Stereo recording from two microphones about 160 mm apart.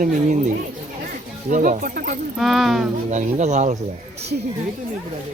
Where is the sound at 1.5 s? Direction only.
55° right (ahead or behind).